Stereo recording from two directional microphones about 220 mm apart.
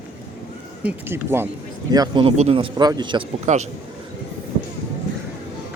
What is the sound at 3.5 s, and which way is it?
Speech, 30° right (ahead or behind).